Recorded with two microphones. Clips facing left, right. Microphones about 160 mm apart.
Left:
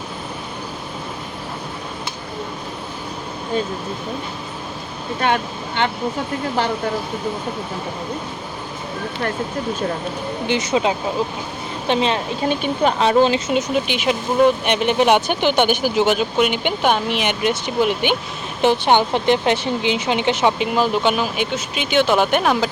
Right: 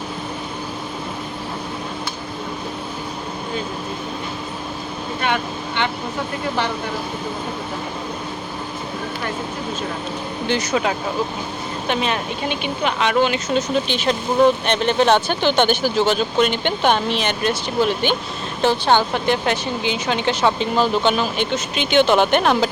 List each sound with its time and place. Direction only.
5.2 s speech: 45° left (ahead or behind)
10.5 s speech: 25° left (ahead or behind)
12.5 s speech: 40° left (ahead or behind)
13.5 s speech: 15° left (ahead or behind)